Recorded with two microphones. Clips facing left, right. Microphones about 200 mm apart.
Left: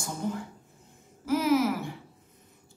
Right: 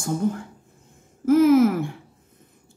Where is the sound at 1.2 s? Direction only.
50° right (ahead or behind).